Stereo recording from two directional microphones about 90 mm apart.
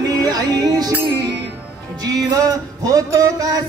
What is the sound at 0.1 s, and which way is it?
Music, 45° right (ahead or behind).